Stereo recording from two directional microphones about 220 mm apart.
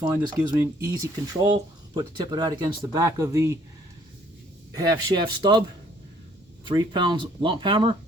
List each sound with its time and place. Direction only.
0.0 s speech: 10° right (ahead or behind)
4.7 s speech: 15° right (ahead or behind)
6.7 s speech: 20° right (ahead or behind)